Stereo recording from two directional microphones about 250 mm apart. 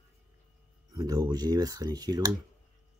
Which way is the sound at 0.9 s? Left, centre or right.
Centre.